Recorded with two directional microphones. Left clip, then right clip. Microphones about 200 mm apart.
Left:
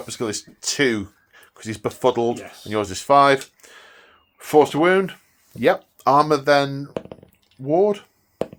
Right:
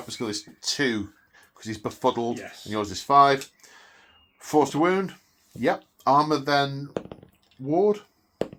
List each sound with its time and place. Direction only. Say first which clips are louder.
0.1 s speech: left 4 dB; 45° left (ahead or behind)